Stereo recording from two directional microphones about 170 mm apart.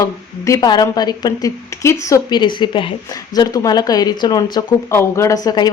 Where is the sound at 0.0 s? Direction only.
20° left (ahead or behind).